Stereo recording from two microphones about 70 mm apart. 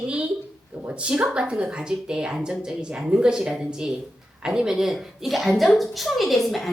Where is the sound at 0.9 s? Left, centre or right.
Centre.